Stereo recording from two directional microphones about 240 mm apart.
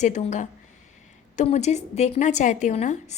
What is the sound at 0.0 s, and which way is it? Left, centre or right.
A woman's voice, left.